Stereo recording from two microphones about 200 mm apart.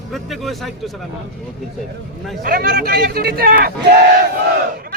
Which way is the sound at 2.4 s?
45° right (ahead or behind).